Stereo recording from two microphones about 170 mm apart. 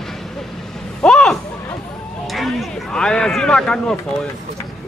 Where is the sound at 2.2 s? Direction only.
Centre (ahead or behind).